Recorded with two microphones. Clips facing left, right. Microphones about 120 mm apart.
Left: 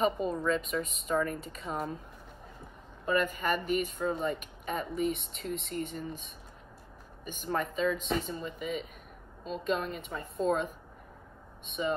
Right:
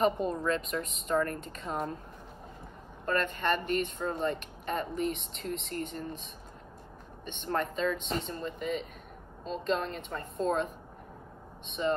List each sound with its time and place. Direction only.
0.0 s speech: centre (ahead or behind)
3.1 s speech: 5° left (ahead or behind)